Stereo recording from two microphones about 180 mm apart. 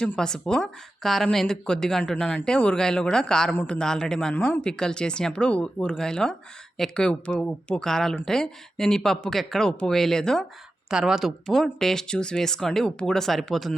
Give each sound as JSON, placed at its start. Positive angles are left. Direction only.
{"t": 0.0, "sound": "speech", "side_deg": 5}